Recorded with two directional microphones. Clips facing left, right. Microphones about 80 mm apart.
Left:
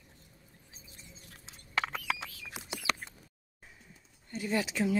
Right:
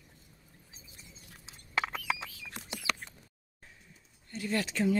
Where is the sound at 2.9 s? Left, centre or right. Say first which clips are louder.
Left 1 dB; left.